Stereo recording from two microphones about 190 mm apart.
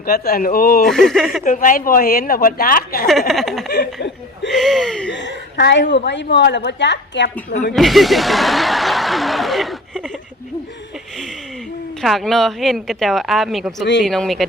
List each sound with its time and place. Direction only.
0.0 s a woman's voice: 50° left (ahead or behind)
0.9 s speech: centre (ahead or behind)
1.5 s a woman's voice: 45° left (ahead or behind)
3.1 s speech: centre (ahead or behind)
5.1 s a woman's voice: 65° left (ahead or behind)
7.7 s speech: centre (ahead or behind)
12.0 s speech: centre (ahead or behind)